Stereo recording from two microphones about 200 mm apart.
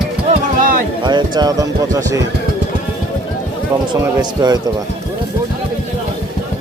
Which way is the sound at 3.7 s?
15° right (ahead or behind).